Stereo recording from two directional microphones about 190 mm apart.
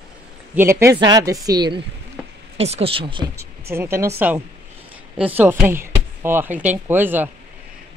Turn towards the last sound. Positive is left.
turn(degrees=-10)  # may be behind; listen again after turning